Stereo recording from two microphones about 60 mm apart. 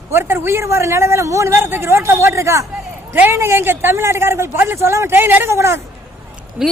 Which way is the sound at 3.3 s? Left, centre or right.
Right.